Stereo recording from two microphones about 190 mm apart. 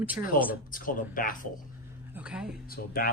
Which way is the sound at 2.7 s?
50° left (ahead or behind).